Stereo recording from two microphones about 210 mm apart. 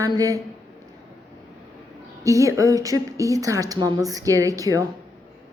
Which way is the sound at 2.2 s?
15° right (ahead or behind).